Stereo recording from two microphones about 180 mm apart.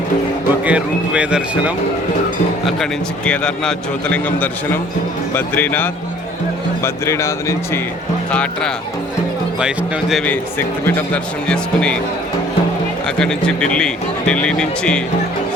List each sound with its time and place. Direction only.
0.6 s speech: 5° right (ahead or behind)
2.6 s a man's voice: 5° left (ahead or behind)
13.1 s a man's voice: 5° left (ahead or behind)